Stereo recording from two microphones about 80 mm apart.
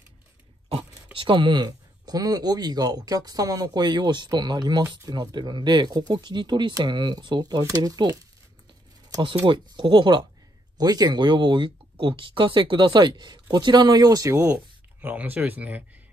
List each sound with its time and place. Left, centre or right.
1.1 s speech: right
7.6 s speech: right
9.5 s speech: right
10.8 s speech: right
14.4 s speech: right